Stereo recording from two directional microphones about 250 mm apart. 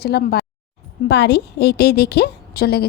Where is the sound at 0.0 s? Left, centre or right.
Left.